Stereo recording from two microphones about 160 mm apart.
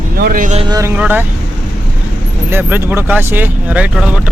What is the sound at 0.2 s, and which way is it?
Speech, 60° right (ahead or behind).